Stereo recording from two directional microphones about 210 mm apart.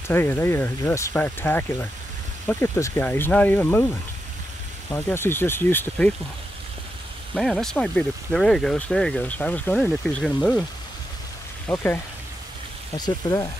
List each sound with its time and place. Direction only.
0.1 s speech: 10° left (ahead or behind)
4.9 s speech: 10° left (ahead or behind)
7.3 s speech: centre (ahead or behind)
11.6 s speech: 10° left (ahead or behind)